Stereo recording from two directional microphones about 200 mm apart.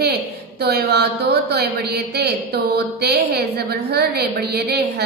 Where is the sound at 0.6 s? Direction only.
55° right (ahead or behind).